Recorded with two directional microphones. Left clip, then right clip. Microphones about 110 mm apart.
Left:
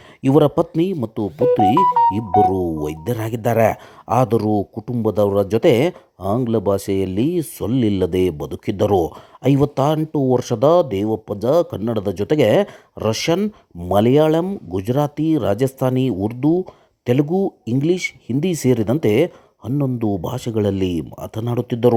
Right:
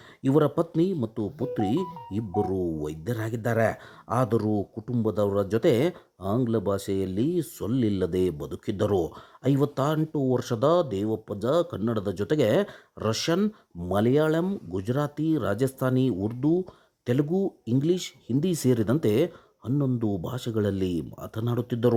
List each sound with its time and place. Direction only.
0.3 s speech: 25° left (ahead or behind)